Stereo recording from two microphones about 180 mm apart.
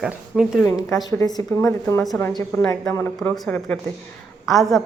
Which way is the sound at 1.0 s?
20° left (ahead or behind).